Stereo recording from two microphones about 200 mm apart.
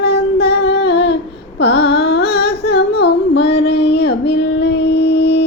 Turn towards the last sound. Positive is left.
turn(degrees=60)  # may be behind; listen again after turning